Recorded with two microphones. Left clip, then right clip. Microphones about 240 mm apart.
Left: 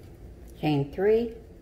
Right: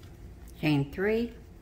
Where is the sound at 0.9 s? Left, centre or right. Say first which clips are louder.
Left 10 dB; right.